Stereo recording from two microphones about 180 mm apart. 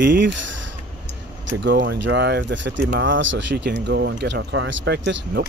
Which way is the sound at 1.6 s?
75° right (ahead or behind).